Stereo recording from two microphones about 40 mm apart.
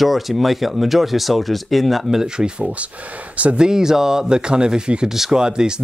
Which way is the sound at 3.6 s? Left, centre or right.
Centre.